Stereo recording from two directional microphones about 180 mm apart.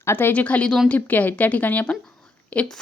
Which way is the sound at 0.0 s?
10° left (ahead or behind).